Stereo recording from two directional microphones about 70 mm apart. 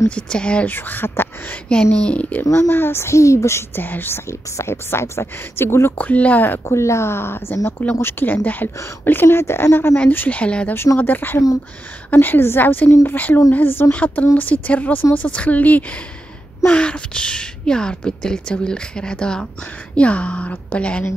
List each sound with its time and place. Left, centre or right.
0.1 s a woman's voice: centre
0.7 s speech: left
1.7 s a woman's voice: centre
2.7 s speech: left
3.8 s speech: left
4.3 s speech: left
5.9 s speech: left
6.6 s speech: left; by 10.7 s centre
11.0 s a woman's voice: left